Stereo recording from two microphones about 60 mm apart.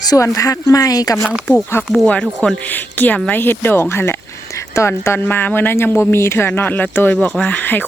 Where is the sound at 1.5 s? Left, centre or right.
Left.